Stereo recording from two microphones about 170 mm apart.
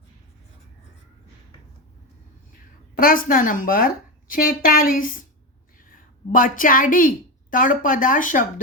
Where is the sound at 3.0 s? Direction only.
55° left (ahead or behind).